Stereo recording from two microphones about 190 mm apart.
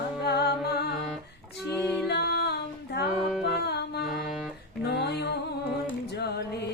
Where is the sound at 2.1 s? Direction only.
60° left (ahead or behind).